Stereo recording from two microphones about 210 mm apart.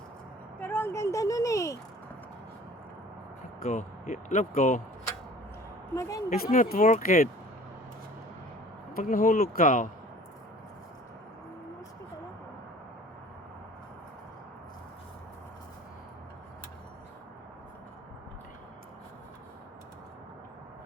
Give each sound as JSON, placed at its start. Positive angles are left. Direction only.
{"t": 0.6, "sound": "a sound", "side_deg": 10}
{"t": 3.6, "sound": "speech", "side_deg": 35}
{"t": 5.9, "sound": "a woman's voice", "side_deg": 15}
{"t": 6.3, "sound": "speech", "side_deg": 45}
{"t": 9.0, "sound": "speech", "side_deg": 40}